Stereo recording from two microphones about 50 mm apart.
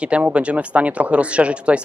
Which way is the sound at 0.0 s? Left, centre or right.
Right.